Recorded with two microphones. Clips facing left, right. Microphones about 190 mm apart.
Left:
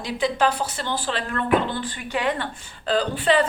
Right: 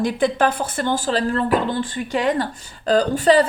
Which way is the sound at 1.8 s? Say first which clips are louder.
Right 5 dB; 45° right (ahead or behind).